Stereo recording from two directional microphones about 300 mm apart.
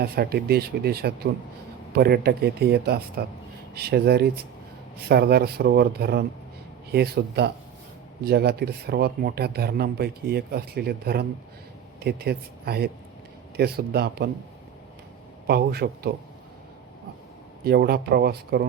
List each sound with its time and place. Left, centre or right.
0.0 s speech: right
15.4 s speech: right
17.7 s speech: right